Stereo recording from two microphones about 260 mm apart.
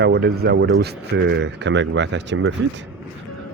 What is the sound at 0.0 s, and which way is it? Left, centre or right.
Speech, right.